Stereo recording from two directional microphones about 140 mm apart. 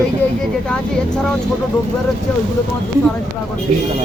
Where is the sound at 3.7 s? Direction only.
65° right (ahead or behind).